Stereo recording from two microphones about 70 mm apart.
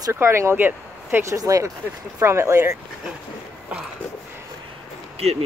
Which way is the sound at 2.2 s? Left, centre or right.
Right.